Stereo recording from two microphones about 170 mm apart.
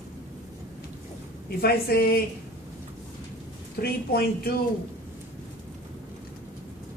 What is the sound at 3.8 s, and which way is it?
Speech, 65° left (ahead or behind).